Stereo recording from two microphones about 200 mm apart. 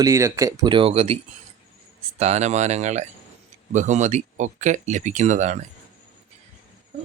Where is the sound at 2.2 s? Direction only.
35° right (ahead or behind).